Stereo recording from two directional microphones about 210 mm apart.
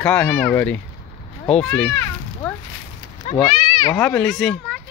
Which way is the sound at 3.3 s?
30° left (ahead or behind).